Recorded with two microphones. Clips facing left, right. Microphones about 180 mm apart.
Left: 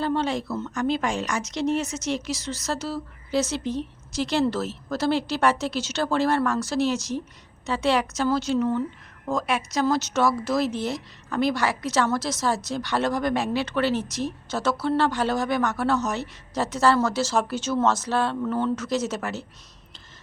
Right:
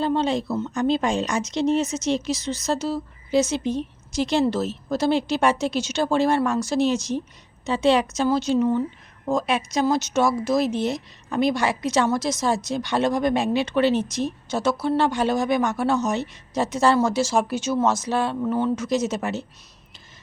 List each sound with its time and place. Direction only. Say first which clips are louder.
0.0 s speech: right 3 dB; 20° right (ahead or behind)